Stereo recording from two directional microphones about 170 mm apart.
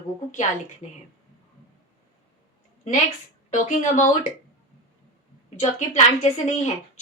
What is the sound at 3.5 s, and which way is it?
Speech, 45° left (ahead or behind).